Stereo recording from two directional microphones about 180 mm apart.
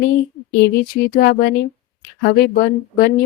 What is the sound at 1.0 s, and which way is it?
Speech, 55° left (ahead or behind).